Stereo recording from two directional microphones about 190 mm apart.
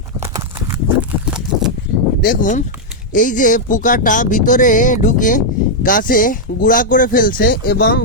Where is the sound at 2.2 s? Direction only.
45° left (ahead or behind).